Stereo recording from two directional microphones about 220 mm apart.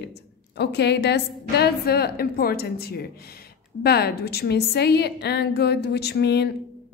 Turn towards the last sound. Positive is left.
turn(degrees=50)  # may be behind; listen again after turning